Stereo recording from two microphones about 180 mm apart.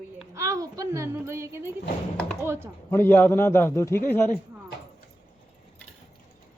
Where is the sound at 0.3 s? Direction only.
20° right (ahead or behind).